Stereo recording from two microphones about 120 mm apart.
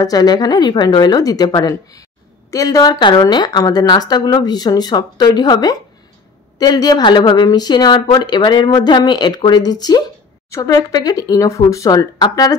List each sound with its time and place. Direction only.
0.0 s speech: 35° left (ahead or behind)